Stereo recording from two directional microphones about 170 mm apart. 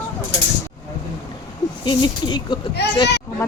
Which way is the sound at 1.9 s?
25° left (ahead or behind).